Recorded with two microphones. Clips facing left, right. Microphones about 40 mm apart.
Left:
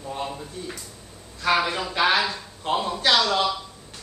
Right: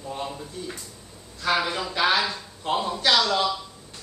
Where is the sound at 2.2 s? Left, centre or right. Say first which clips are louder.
Left 1 dB; centre.